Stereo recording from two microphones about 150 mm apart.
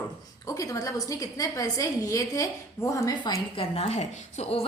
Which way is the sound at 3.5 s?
40° left (ahead or behind).